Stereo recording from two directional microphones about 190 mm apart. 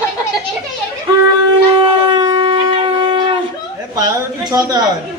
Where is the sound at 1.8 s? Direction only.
30° right (ahead or behind).